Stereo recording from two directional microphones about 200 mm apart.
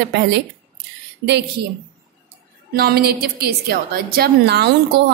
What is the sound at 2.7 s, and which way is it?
A woman's voice, 50° right (ahead or behind).